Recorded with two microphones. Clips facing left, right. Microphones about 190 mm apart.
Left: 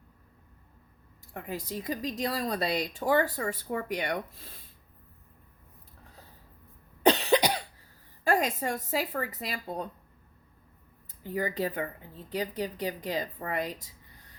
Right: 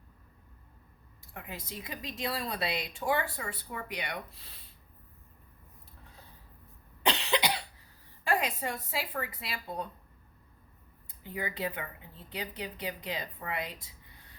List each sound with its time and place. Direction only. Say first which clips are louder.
1.3 s speech: left 7 dB; 40° left (ahead or behind)
7.0 s cough: left 7 dB; 45° left (ahead or behind)
8.2 s speech: left 4 dB; 45° left (ahead or behind)
11.2 s speech: left 5 dB; 40° left (ahead or behind)